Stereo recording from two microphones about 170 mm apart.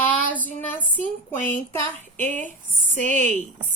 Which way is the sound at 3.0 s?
50° left (ahead or behind).